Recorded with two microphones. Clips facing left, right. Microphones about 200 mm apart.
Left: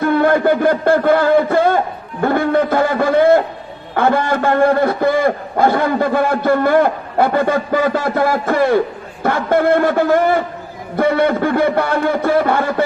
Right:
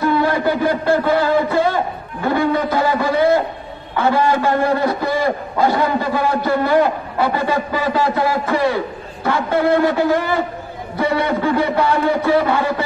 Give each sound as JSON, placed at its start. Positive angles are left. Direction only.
{"t": 0.0, "sound": "a man's voice", "side_deg": 55}
{"t": 3.9, "sound": "a sound", "side_deg": 50}
{"t": 11.0, "sound": "a man's voice", "side_deg": 50}